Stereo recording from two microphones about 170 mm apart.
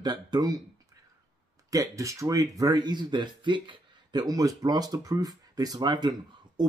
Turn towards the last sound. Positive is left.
turn(degrees=-25)  # may be behind; listen again after turning